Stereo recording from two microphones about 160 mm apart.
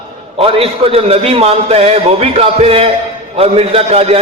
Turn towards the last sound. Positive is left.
turn(degrees=-35)  # may be behind; listen again after turning